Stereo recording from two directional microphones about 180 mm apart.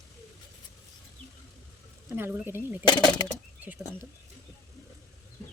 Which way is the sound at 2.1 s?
10° right (ahead or behind).